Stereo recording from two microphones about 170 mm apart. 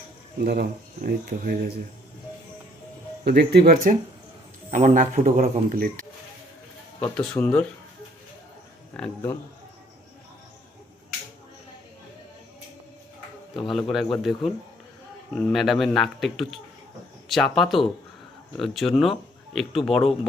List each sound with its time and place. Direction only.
0.4 s speech: 65° right (ahead or behind)
3.2 s speech: 70° right (ahead or behind)
4.7 s a man's voice: 50° right (ahead or behind)
7.0 s speech: 5° left (ahead or behind)
8.9 s speech: 15° left (ahead or behind)
13.6 s speech: centre (ahead or behind)